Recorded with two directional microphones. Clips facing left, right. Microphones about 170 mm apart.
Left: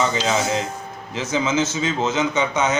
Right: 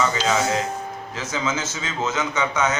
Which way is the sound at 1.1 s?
25° left (ahead or behind).